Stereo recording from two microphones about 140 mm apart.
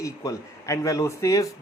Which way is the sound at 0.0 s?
25° left (ahead or behind).